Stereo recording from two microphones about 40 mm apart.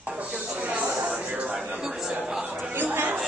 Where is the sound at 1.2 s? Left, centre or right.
Right.